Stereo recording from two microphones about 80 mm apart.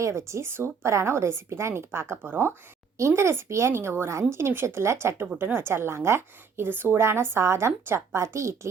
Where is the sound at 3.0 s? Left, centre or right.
Right.